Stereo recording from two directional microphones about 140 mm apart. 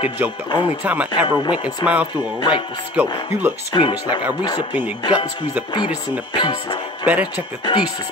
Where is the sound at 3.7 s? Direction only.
30° left (ahead or behind).